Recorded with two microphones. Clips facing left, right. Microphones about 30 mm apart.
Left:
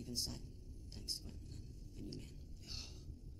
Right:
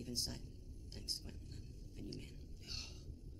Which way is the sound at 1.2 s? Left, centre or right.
Right.